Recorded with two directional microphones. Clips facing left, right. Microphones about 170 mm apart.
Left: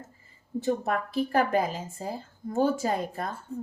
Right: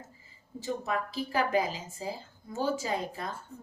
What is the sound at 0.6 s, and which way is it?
A woman's voice, 55° left (ahead or behind).